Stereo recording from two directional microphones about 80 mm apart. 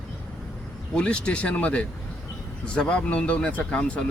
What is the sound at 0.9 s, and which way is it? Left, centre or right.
Speech, centre.